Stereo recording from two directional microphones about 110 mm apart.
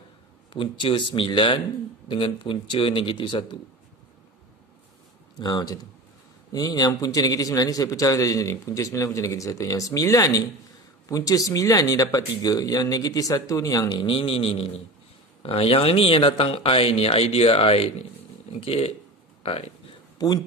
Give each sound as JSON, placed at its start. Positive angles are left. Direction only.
{"t": 0.5, "sound": "speech", "side_deg": 55}
{"t": 5.4, "sound": "a man's voice", "side_deg": 40}
{"t": 13.8, "sound": "speech", "side_deg": 50}
{"t": 20.2, "sound": "speech", "side_deg": 35}